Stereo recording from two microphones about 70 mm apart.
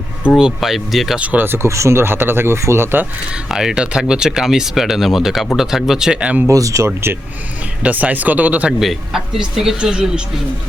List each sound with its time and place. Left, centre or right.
0.3 s speech: centre
1.2 s speech: right
1.5 s speech: right
3.3 s speech: centre
6.5 s speech: right
7.8 s speech: right
8.8 s speech: centre